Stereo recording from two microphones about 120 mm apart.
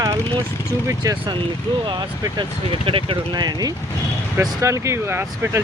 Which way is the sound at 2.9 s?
45° right (ahead or behind).